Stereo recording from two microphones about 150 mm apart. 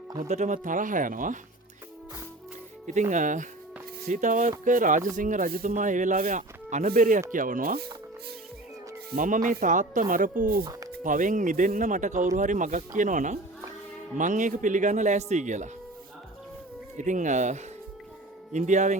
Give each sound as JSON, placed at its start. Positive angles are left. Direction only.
{"t": 0.2, "sound": "speech", "side_deg": -55}
{"t": 2.8, "sound": "speech", "side_deg": -55}
{"t": 6.8, "sound": "speech", "side_deg": -70}
{"t": 9.1, "sound": "speech", "side_deg": -60}
{"t": 10.7, "sound": "music", "side_deg": -25}
{"t": 10.9, "sound": "speech", "side_deg": -60}
{"t": 17.0, "sound": "speech", "side_deg": -55}